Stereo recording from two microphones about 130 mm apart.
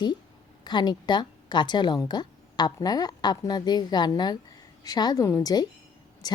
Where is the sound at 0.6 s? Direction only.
35° left (ahead or behind).